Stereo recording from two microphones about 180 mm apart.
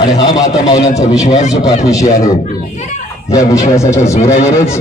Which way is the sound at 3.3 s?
20° left (ahead or behind).